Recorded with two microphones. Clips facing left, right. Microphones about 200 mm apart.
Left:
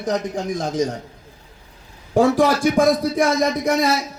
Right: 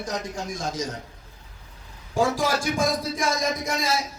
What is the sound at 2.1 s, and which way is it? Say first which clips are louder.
Speech: left 8 dB; 65° left (ahead or behind).